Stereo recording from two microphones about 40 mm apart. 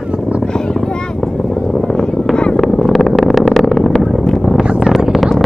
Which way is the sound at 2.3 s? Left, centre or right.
Centre.